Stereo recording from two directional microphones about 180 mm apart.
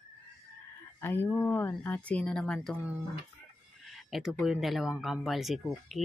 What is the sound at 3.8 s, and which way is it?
Speech, centre (ahead or behind).